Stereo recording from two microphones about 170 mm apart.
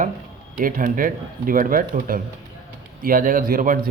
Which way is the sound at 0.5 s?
55° right (ahead or behind).